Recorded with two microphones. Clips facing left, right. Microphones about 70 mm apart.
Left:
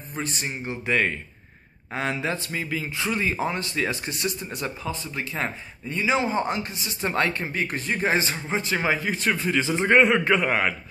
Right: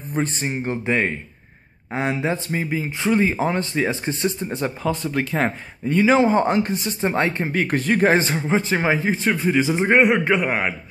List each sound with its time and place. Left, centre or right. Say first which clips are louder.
0.1 s speech: right 7 dB; right
4.8 s speech: right 8 dB; right
7.0 s speech: right 2 dB; right
7.5 s speech: right 7 dB; right
8.5 s speech: right 4 dB; right; by 10.7 s centre